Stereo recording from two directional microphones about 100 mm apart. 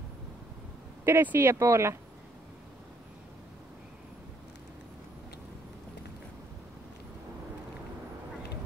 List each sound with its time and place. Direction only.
1.0 s speech: 20° right (ahead or behind)